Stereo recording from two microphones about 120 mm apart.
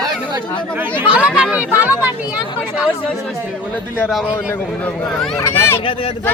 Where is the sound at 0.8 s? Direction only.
15° right (ahead or behind).